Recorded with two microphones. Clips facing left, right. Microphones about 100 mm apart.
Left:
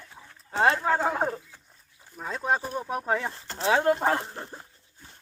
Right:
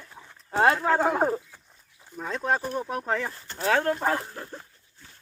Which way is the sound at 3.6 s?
20° left (ahead or behind).